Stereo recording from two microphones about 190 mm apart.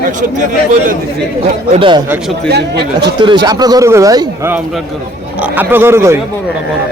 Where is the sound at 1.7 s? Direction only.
25° right (ahead or behind).